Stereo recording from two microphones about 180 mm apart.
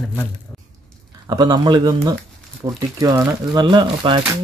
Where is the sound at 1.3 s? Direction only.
25° right (ahead or behind).